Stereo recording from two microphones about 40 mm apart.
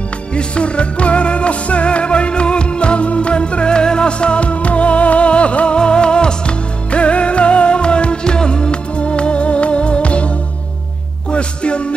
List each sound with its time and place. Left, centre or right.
0.3 s music: left